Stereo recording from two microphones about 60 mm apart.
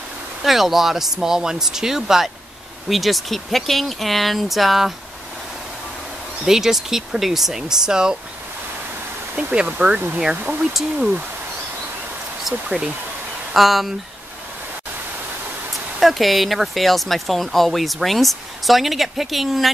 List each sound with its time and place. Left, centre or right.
0.4 s speech: centre
6.4 s speech: centre
9.3 s speech: right
10.3 s speech: right
12.6 s speech: centre
15.7 s speech: centre